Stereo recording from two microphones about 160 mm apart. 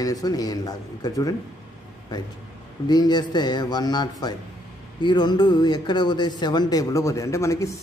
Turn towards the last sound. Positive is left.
turn(degrees=20)  # may be behind; listen again after turning